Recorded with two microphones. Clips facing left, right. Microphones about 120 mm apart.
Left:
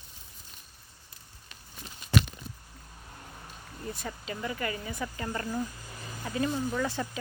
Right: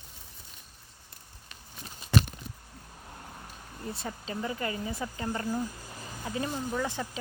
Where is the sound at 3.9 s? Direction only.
25° right (ahead or behind).